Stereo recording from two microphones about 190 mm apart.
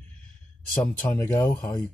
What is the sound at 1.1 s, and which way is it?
Speech, 10° left (ahead or behind).